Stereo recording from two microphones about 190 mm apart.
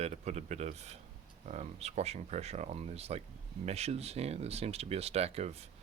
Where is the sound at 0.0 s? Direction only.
35° right (ahead or behind).